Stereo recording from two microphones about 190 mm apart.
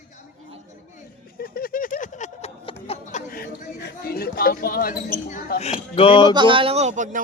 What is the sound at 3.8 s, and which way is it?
Speech, 55° left (ahead or behind).